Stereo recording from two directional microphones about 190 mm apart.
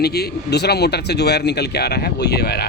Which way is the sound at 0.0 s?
55° left (ahead or behind).